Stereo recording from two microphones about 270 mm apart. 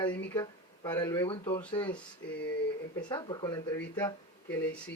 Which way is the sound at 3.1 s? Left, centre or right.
Centre.